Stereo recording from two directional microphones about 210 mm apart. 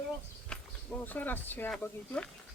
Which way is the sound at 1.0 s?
10° left (ahead or behind).